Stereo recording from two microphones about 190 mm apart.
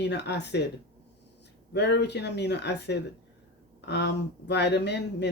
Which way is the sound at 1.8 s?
65° left (ahead or behind).